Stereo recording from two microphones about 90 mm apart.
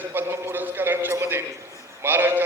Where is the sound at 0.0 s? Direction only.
25° right (ahead or behind).